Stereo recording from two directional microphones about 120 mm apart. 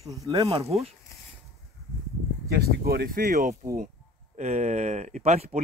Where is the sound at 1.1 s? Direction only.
25° left (ahead or behind).